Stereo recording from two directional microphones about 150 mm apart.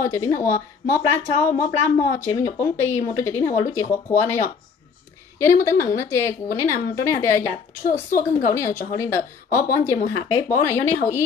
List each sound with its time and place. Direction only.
0.0 s a woman's voice: 20° left (ahead or behind)